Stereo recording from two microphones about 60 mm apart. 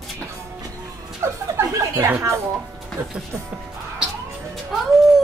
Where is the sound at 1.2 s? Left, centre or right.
Right.